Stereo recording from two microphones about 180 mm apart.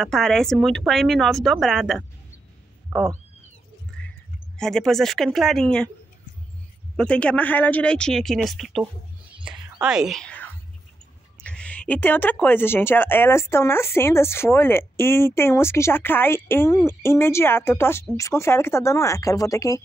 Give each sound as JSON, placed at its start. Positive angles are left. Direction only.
{"t": 0.0, "sound": "speech", "side_deg": 0}
{"t": 3.9, "sound": "a sound", "side_deg": 5}
{"t": 4.6, "sound": "speech", "side_deg": 5}
{"t": 7.0, "sound": "speech", "side_deg": 5}